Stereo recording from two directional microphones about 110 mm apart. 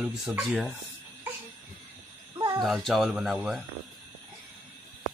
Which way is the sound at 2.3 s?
30° right (ahead or behind).